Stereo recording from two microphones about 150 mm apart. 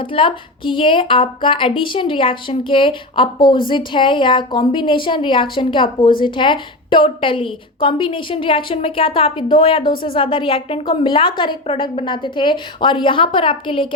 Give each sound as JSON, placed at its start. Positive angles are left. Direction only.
{"t": 0.0, "sound": "a woman's voice", "side_deg": 35}